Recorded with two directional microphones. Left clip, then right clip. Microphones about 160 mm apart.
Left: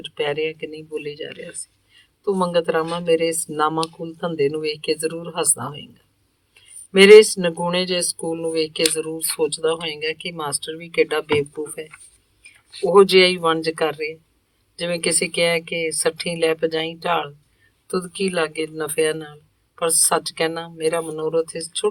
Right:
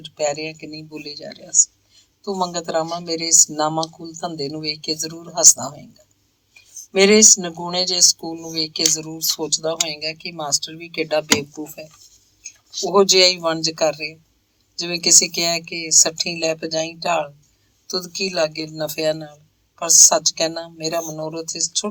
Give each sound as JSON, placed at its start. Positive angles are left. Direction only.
{"t": 0.0, "sound": "speech", "side_deg": -40}
{"t": 12.8, "sound": "speech", "side_deg": -40}